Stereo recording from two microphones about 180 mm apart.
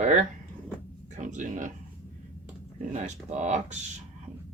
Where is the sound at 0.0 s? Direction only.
40° right (ahead or behind).